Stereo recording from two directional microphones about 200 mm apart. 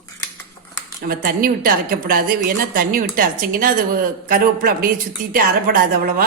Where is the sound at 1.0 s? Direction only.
45° right (ahead or behind).